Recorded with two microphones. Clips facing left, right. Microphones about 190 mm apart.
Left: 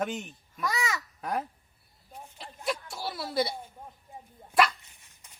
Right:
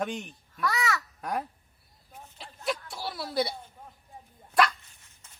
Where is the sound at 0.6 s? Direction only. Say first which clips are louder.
Right 2 dB; 20° left (ahead or behind).